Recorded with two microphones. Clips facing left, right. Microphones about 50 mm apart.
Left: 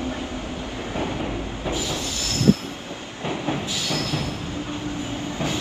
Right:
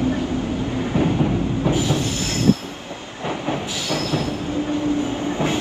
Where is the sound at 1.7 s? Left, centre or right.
Right.